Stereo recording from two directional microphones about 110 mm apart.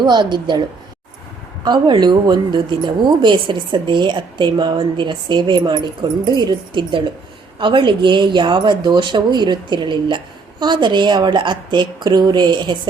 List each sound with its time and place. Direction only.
0.0 s a woman's voice: 40° right (ahead or behind)
1.6 s a woman's voice: 40° right (ahead or behind)